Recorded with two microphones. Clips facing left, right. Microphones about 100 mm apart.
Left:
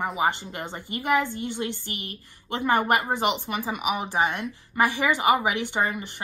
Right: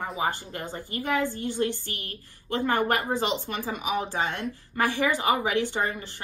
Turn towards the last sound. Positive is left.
turn(degrees=15)  # may be behind; listen again after turning